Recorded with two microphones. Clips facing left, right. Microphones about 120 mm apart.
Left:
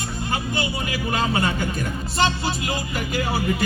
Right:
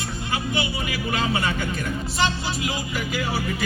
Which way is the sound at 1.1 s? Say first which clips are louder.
Left 2 dB; 40° left (ahead or behind).